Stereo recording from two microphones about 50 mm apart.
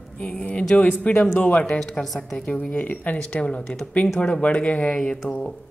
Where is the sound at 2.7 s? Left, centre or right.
Left.